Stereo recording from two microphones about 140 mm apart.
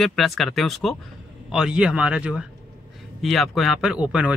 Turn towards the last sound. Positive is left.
turn(degrees=-10)  # may be behind; listen again after turning